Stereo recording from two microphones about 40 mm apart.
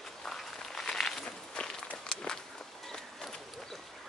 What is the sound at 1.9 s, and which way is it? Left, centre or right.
Walk, centre.